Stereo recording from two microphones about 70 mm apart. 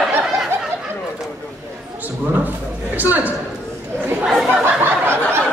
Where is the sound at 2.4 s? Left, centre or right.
Right.